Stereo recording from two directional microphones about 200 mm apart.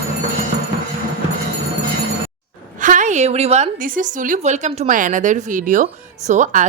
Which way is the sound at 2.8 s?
40° right (ahead or behind).